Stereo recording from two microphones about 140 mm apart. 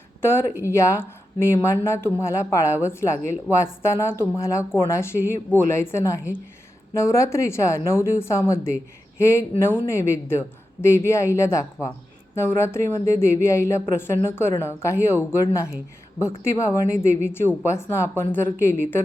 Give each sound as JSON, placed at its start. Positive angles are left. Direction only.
{"t": 0.2, "sound": "speech", "side_deg": 15}
{"t": 16.7, "sound": "a woman's voice", "side_deg": 20}